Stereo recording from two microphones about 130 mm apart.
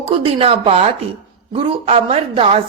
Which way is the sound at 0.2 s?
45° right (ahead or behind).